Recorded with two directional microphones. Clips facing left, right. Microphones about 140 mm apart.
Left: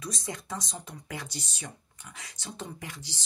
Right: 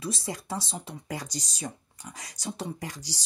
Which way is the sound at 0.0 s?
30° right (ahead or behind).